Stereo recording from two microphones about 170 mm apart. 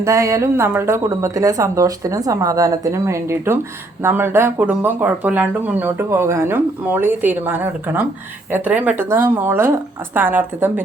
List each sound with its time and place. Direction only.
0.0 s speech: 15° right (ahead or behind)